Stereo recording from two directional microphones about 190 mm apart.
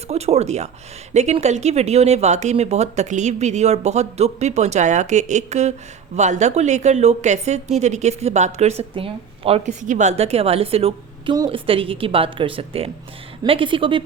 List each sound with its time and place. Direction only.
0.1 s a woman's voice: 35° right (ahead or behind)